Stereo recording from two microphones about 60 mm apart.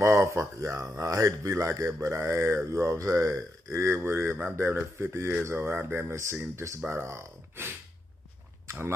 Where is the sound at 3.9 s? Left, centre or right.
Right.